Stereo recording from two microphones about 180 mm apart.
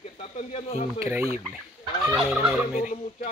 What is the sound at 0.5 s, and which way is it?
Speech, 35° left (ahead or behind).